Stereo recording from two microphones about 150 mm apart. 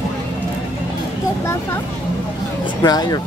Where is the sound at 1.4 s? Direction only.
20° left (ahead or behind).